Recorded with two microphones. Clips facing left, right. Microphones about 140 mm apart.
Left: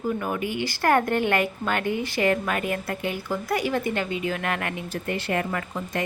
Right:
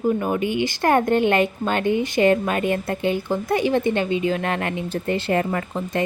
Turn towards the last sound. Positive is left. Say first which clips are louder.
# right 5 dB
turn(degrees=-30)  # may be behind; listen again after turning